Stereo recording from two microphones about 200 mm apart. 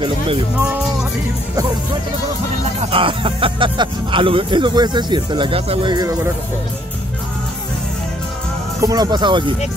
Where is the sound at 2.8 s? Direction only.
25° right (ahead or behind).